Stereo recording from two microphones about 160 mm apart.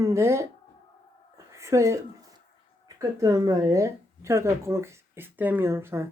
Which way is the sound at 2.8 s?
20° right (ahead or behind).